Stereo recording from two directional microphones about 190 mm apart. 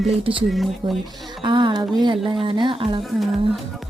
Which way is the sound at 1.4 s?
25° right (ahead or behind).